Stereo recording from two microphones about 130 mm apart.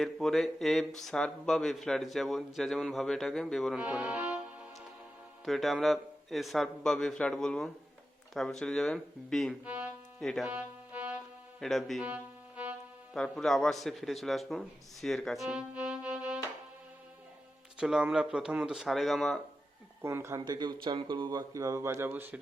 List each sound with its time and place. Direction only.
0.0 s a man's voice: centre (ahead or behind)
3.8 s music: 10° right (ahead or behind)
5.5 s a man's voice: centre (ahead or behind)
9.6 s music: 10° right (ahead or behind)
10.2 s a man's voice: 5° left (ahead or behind)
10.5 s music: 10° right (ahead or behind)
11.6 s a man's voice: centre (ahead or behind)
12.0 s music: 10° right (ahead or behind)
13.1 s a man's voice: 5° left (ahead or behind)
15.4 s music: 10° right (ahead or behind)
17.7 s a man's voice: 5° right (ahead or behind)
20.0 s speech: 20° right (ahead or behind)
20.4 s speech: 35° right (ahead or behind); by 22.4 s 15° right (ahead or behind)